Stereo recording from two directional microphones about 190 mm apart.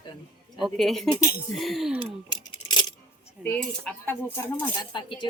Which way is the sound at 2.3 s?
20° left (ahead or behind).